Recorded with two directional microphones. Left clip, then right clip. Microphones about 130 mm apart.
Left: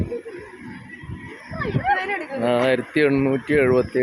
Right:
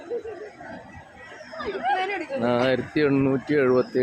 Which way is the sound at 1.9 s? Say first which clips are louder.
Left 3 dB; 5° left (ahead or behind).